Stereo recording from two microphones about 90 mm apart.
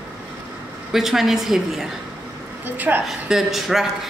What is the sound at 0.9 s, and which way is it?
Speech, 5° right (ahead or behind).